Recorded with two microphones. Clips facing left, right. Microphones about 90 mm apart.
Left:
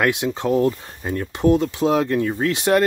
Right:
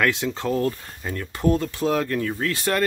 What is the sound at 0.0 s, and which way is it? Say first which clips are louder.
Speech: left 3 dB; 15° left (ahead or behind).